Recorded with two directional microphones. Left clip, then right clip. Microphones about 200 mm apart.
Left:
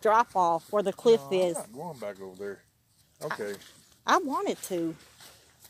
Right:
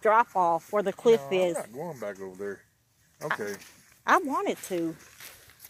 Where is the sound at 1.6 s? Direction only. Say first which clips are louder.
Right 3 dB; 35° right (ahead or behind).